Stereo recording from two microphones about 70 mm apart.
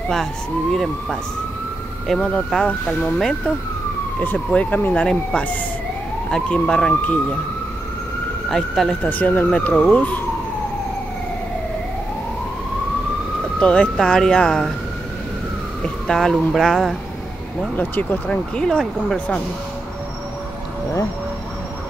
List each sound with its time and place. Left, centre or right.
0.1 s speech: centre
2.0 s speech: centre
4.5 s speech: left
6.3 s speech: centre
6.9 s speech: left
8.5 s speech: centre
9.0 s speech: left
13.6 s speech: centre
15.8 s speech: centre
17.7 s speech: left
18.3 s speech: centre